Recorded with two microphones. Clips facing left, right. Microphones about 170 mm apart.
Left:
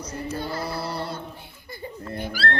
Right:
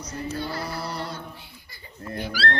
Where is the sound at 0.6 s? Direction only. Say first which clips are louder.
Left 2 dB; 30° left (ahead or behind).